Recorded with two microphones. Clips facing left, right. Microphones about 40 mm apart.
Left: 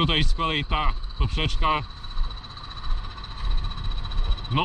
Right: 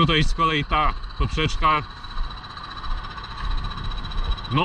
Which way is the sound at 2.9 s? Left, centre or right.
Right.